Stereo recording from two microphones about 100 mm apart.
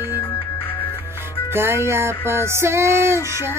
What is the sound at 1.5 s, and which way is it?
Music, 25° right (ahead or behind).